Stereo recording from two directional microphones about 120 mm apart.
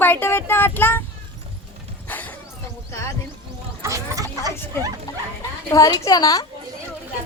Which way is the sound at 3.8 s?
25° right (ahead or behind).